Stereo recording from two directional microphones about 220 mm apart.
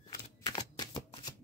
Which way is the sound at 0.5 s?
20° left (ahead or behind).